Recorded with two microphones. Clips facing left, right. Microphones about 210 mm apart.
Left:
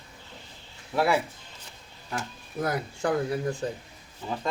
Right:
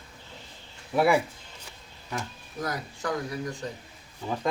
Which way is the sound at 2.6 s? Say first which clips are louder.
Left 4 dB; 30° left (ahead or behind).